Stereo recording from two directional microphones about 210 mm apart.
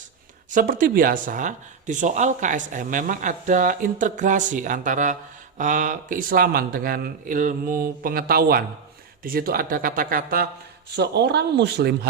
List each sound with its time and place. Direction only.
0.5 s speech: 40° right (ahead or behind)